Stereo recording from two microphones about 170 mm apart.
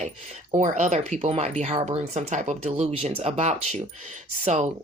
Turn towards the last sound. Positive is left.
turn(degrees=-45)  # may be behind; listen again after turning